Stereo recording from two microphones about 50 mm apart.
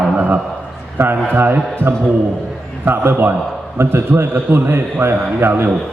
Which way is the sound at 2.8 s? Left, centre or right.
Right.